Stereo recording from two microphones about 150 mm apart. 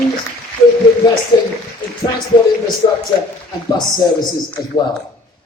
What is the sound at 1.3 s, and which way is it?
Speech, 30° left (ahead or behind).